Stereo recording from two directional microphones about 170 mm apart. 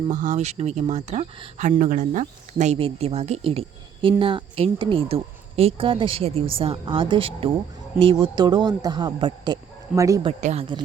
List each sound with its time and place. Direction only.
0.1 s speech: 50° right (ahead or behind)
1.8 s speech: 50° right (ahead or behind); by 10.2 s 20° right (ahead or behind)
10.4 s speech: 35° right (ahead or behind)